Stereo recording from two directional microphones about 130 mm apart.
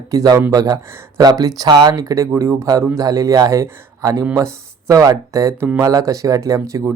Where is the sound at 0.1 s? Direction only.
25° right (ahead or behind).